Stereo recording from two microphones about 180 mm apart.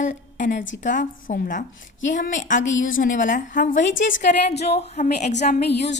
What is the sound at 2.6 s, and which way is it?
Speech, 90° left.